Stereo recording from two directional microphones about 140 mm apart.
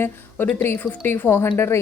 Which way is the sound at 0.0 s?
15° left (ahead or behind).